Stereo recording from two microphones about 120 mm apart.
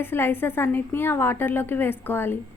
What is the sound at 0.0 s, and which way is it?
A woman's voice, 20° left (ahead or behind).